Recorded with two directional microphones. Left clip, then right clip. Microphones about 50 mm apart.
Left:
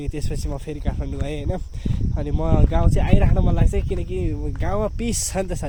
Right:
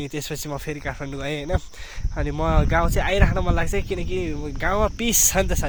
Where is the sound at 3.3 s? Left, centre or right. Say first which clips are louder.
Right 1 dB; left.